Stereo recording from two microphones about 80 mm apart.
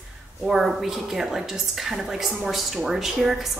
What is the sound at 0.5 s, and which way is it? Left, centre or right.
A woman's voice, centre.